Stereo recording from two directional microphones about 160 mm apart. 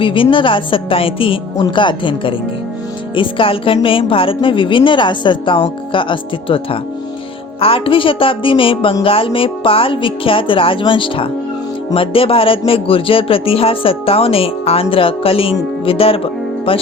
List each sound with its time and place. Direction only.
0.0 s speech: 30° left (ahead or behind)